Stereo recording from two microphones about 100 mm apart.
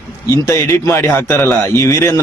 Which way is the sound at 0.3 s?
30° left (ahead or behind).